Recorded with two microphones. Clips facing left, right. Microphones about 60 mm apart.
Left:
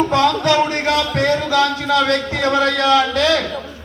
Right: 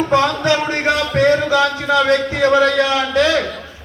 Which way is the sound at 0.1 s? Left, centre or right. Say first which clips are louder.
Even; right.